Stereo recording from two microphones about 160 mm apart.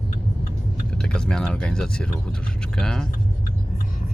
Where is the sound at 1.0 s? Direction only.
5° left (ahead or behind).